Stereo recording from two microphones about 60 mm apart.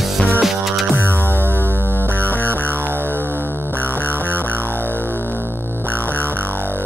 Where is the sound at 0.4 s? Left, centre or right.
Centre.